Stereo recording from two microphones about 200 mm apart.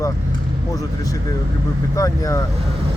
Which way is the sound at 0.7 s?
15° left (ahead or behind).